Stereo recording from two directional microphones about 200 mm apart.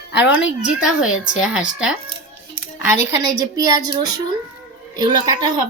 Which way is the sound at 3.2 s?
20° right (ahead or behind).